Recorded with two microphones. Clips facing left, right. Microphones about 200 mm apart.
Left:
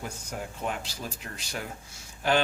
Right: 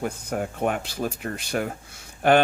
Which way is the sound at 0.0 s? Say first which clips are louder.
Right 9 dB; 60° right (ahead or behind).